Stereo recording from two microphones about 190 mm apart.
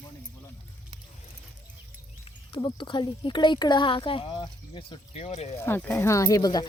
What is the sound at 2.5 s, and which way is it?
Speech, 25° left (ahead or behind).